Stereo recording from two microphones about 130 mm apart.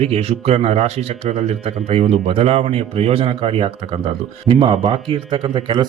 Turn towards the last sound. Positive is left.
turn(degrees=-35)  # may be behind; listen again after turning